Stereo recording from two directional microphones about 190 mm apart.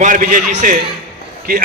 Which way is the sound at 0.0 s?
45° right (ahead or behind).